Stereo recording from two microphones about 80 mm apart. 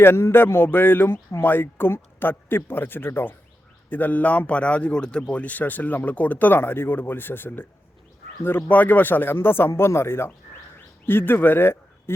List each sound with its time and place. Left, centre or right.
0.0 s a man's voice: left